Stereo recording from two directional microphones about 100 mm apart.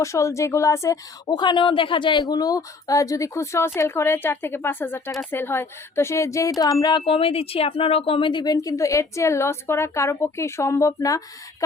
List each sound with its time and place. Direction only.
0.0 s speech: 30° left (ahead or behind)
1.4 s speech: 50° left (ahead or behind)
2.3 s a woman's voice: 40° left (ahead or behind)
7.0 s speech: 70° left (ahead or behind); by 8.5 s 50° left (ahead or behind)
8.5 s a woman's voice: 35° left (ahead or behind)